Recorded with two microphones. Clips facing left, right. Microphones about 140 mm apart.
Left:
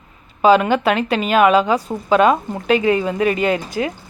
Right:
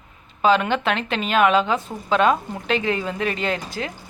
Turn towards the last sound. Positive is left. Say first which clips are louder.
# left 7 dB
turn(degrees=10)  # may be behind; listen again after turning